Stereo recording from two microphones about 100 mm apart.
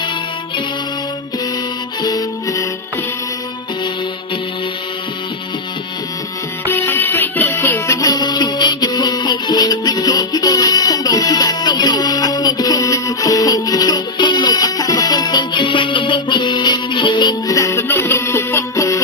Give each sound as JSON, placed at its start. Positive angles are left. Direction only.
{"t": 2.0, "sound": "music", "side_deg": 40}
{"t": 6.7, "sound": "music", "side_deg": 20}
{"t": 17.4, "sound": "music", "side_deg": 35}